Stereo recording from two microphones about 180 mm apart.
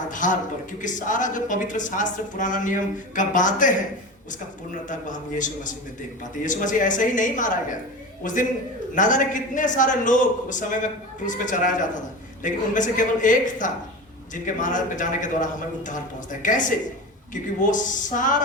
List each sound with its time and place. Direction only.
0.1 s speech: 45° left (ahead or behind)
4.9 s speech: 45° left (ahead or behind)